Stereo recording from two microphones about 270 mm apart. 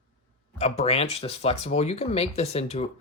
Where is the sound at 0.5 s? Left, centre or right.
Left.